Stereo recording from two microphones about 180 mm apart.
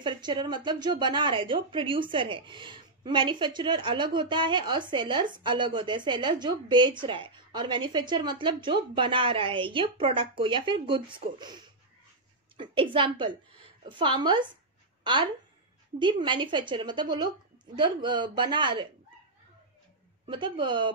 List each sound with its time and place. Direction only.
0.0 s a woman's voice: 25° right (ahead or behind)
12.9 s a woman's voice: 25° right (ahead or behind)
16.0 s a woman's voice: 25° right (ahead or behind)
20.2 s a woman's voice: 25° right (ahead or behind)